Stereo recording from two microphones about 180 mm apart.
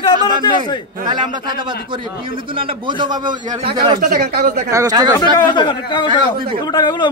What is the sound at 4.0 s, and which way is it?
Speech, 60° right (ahead or behind).